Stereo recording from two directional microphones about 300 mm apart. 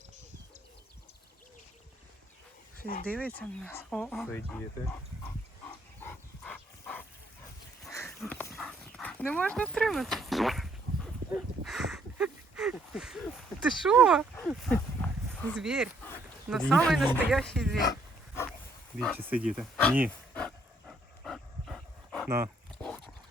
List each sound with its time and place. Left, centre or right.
2.7 s speech: left
3.1 s speech: centre
6.0 s dog: centre
13.8 s speech: centre
18.9 s speech: centre
20.0 s dog: centre